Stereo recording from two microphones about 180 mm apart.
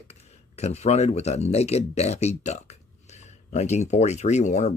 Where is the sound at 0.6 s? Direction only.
35° left (ahead or behind).